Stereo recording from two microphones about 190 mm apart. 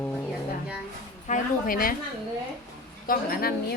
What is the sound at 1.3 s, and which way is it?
Speech, 45° left (ahead or behind).